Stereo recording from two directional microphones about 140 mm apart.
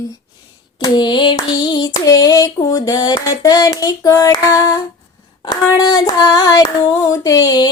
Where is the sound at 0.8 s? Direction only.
30° left (ahead or behind).